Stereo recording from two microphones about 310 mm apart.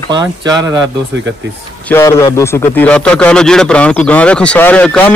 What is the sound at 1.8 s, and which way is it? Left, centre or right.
A man's voice, centre.